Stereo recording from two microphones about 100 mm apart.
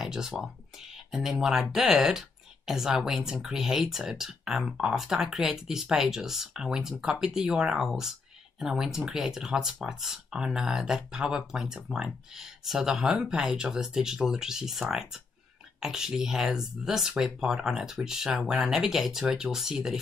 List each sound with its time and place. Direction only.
0.0 s speech: 5° right (ahead or behind)